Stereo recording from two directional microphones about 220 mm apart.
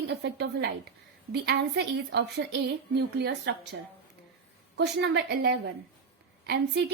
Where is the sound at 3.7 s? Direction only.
55° right (ahead or behind).